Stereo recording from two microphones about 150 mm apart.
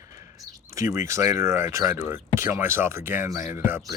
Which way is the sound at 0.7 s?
20° right (ahead or behind).